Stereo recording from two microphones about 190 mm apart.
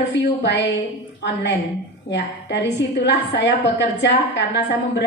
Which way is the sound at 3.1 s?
65° left (ahead or behind).